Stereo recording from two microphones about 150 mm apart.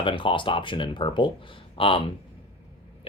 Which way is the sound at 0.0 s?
35° left (ahead or behind).